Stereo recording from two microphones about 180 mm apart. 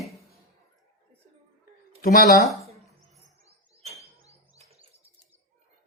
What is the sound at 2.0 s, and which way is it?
Speech, 50° left (ahead or behind).